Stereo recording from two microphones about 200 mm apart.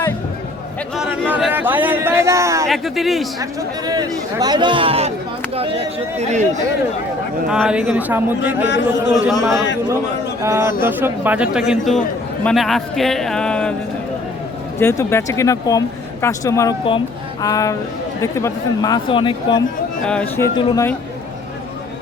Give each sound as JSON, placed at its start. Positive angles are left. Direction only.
{"t": 0.9, "sound": "a sound", "side_deg": -5}
{"t": 2.6, "sound": "a man's voice", "side_deg": 0}
{"t": 3.8, "sound": "speech", "side_deg": -20}
{"t": 6.1, "sound": "speech", "side_deg": -35}
{"t": 7.4, "sound": "a man's voice", "side_deg": -5}
{"t": 8.6, "sound": "a man's voice", "side_deg": 65}
{"t": 9.1, "sound": "a man's voice", "side_deg": 0}
{"t": 10.4, "sound": "a man's voice", "side_deg": -15}
{"t": 14.8, "sound": "speech", "side_deg": 15}
{"t": 20.1, "sound": "speech", "side_deg": 10}
{"t": 20.6, "sound": "speech", "side_deg": 25}